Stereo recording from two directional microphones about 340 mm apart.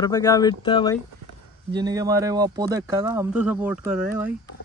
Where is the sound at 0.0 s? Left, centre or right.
Centre.